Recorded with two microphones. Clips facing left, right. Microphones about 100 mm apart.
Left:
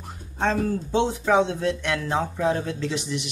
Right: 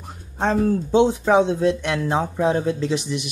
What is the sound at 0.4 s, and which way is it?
Speech, 20° right (ahead or behind).